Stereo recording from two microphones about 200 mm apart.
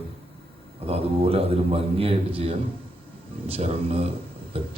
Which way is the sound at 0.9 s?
30° right (ahead or behind).